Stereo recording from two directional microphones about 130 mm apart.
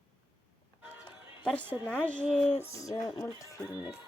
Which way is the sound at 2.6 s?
25° left (ahead or behind).